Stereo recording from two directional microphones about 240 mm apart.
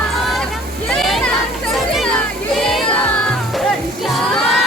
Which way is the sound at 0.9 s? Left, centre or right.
Centre.